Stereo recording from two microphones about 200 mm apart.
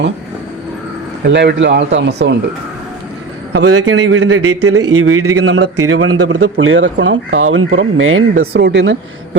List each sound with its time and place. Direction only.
1.3 s speech: 60° right (ahead or behind)
3.5 s speech: 80° right
7.7 s speech: 70° right (ahead or behind); by 8.6 s 90° right
8.6 s speech: 60° right (ahead or behind)